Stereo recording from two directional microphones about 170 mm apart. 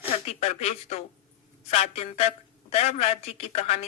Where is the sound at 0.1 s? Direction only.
35° left (ahead or behind).